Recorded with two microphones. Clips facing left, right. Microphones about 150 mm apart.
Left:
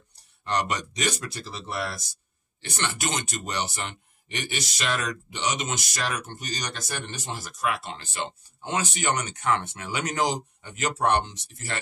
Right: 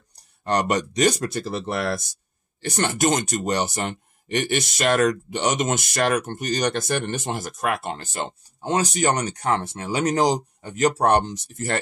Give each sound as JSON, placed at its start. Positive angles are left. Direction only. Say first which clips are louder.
{"t": 0.1, "sound": "speech", "louder": "right 5 dB", "side_deg": -45}
{"t": 2.6, "sound": "speech", "louder": "right 9 dB", "side_deg": -45}